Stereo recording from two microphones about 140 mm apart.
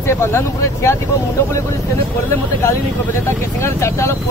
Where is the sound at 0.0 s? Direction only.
20° left (ahead or behind).